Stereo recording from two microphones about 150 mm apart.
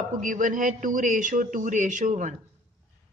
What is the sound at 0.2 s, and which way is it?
A man's voice, 60° right (ahead or behind).